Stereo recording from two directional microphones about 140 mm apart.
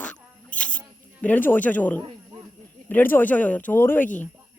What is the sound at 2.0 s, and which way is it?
Snake, 35° right (ahead or behind).